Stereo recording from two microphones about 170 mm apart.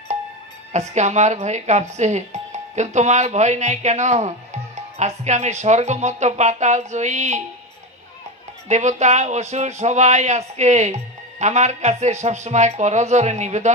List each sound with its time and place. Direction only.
0.7 s speech: 45° right (ahead or behind)
8.6 s speech: 45° right (ahead or behind)